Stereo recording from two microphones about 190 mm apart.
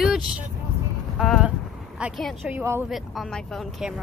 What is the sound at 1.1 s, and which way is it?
Speech, centre (ahead or behind).